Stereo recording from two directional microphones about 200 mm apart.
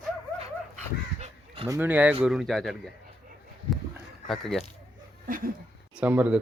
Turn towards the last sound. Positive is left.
turn(degrees=-5)  # may be behind; listen again after turning